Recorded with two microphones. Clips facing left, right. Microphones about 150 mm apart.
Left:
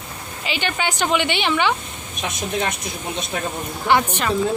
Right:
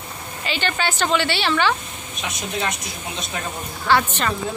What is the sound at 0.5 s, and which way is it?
A woman's voice, 15° left (ahead or behind).